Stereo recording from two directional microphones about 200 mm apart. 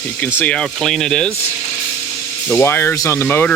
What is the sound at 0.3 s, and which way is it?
Speech, 5° left (ahead or behind).